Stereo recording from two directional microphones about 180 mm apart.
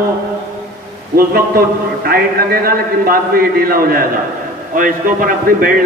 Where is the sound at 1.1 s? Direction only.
55° right (ahead or behind).